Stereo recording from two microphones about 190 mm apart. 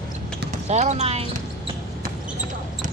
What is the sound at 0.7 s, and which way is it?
Speech, 35° right (ahead or behind).